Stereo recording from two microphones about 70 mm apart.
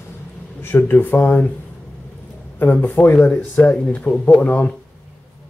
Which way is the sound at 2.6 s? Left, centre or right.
Left.